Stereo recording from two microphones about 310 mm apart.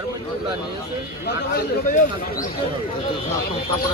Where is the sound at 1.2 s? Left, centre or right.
Left.